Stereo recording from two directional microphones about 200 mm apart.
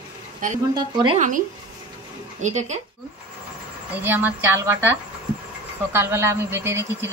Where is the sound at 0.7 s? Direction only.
20° right (ahead or behind).